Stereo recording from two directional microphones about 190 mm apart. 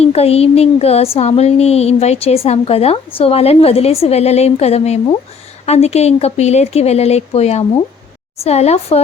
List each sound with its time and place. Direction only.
0.0 s speech: 30° left (ahead or behind)